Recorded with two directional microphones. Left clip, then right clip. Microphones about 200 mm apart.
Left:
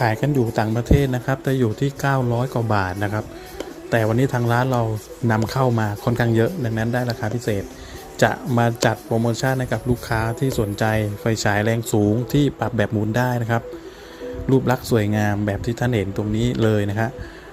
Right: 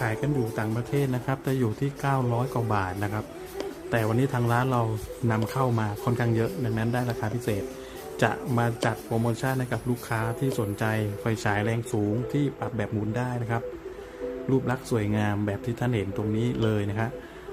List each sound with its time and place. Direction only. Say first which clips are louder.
0.0 s speech: left 8 dB; 25° left (ahead or behind)